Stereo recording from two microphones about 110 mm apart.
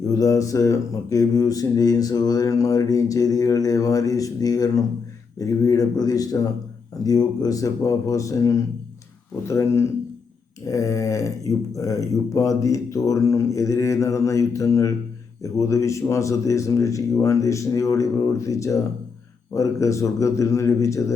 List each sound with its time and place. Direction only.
0.1 s speech: 30° left (ahead or behind)